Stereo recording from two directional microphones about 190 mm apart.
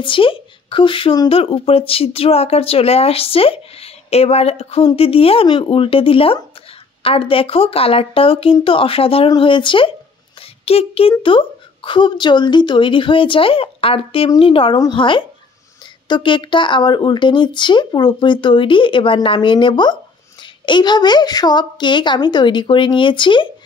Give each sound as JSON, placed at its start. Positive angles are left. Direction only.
{"t": 0.0, "sound": "a woman's voice", "side_deg": 25}